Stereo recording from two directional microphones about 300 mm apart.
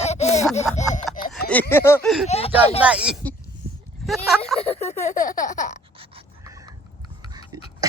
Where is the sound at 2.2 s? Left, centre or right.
Left.